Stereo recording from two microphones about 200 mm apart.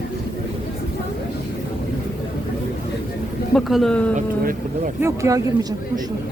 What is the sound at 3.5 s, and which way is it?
Speech, centre (ahead or behind).